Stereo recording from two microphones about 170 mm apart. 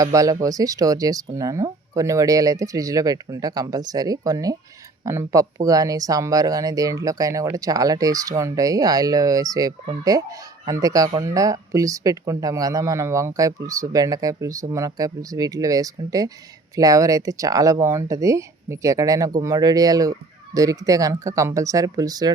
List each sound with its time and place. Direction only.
0.0 s speech: 20° right (ahead or behind)